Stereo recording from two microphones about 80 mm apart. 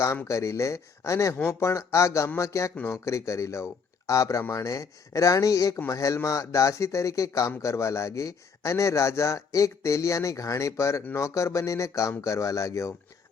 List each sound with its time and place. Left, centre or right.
0.3 s a man's voice: left